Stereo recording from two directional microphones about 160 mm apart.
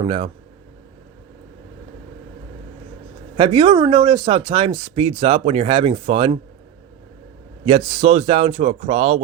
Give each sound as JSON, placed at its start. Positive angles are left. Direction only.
{"t": 0.0, "sound": "speech", "side_deg": -35}
{"t": 3.3, "sound": "speech", "side_deg": -35}
{"t": 7.6, "sound": "speech", "side_deg": -35}